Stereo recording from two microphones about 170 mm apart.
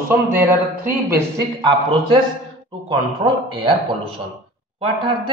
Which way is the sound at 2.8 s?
30° right (ahead or behind).